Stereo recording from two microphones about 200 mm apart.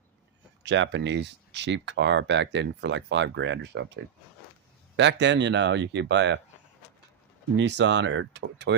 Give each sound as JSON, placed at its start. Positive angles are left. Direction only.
{"t": 0.6, "sound": "speech", "side_deg": -60}
{"t": 7.5, "sound": "speech", "side_deg": -60}